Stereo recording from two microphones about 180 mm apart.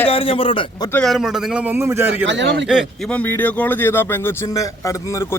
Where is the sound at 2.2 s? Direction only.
85° right.